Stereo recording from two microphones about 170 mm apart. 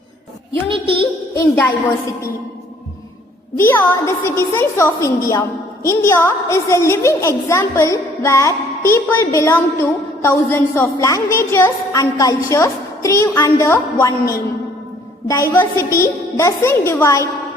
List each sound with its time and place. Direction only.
1.5 s a woman's voice: 10° left (ahead or behind)
3.6 s a woman's voice: 10° left (ahead or behind)